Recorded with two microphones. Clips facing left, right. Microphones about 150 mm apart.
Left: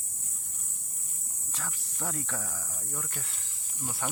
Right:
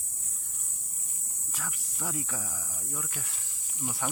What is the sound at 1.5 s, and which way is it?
Cricket, 10° right (ahead or behind).